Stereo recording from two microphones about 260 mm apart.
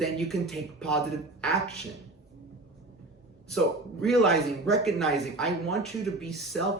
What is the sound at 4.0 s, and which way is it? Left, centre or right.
Speech, centre.